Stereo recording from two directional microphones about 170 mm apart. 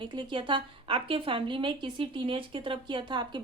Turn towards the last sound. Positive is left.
turn(degrees=-25)  # may be behind; listen again after turning